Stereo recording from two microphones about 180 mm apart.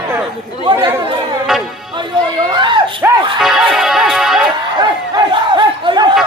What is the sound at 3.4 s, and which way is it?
Music, centre (ahead or behind).